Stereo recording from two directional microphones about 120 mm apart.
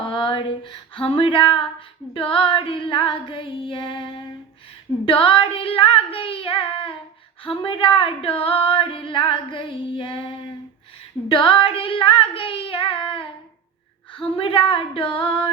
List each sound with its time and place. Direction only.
0.0 s a sound: 45° left (ahead or behind)
2.1 s female singing: 45° left (ahead or behind)
14.3 s female singing: 50° left (ahead or behind)